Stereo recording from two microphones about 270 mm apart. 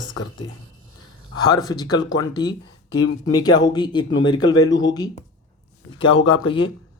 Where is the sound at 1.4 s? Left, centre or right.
Centre.